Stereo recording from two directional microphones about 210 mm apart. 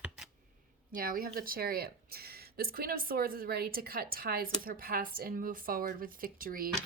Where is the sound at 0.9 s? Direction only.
45° right (ahead or behind).